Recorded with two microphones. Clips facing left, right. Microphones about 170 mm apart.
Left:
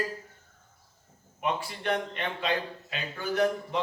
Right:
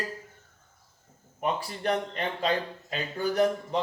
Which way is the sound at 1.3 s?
40° right (ahead or behind).